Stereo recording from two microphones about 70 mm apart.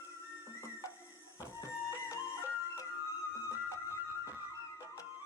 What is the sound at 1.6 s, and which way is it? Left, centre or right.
Music, left.